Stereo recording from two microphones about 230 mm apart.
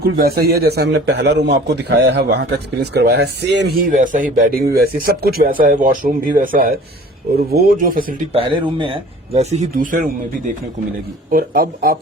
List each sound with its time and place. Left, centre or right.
0.0 s a man's voice: right
3.8 s speech: right
8.3 s speech: right